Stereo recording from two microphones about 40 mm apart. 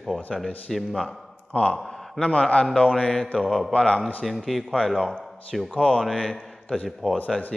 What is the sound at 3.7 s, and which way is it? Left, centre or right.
Speech, left.